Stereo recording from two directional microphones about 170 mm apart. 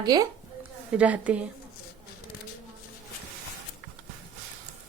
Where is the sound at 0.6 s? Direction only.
10° right (ahead or behind).